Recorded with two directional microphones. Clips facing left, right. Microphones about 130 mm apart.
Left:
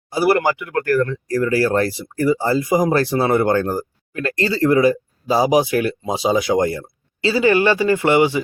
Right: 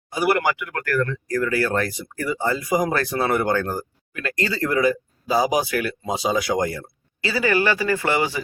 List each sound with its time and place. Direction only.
0.1 s speech: 30° left (ahead or behind)